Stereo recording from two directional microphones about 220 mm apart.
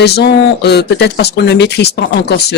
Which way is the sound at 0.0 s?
50° left (ahead or behind).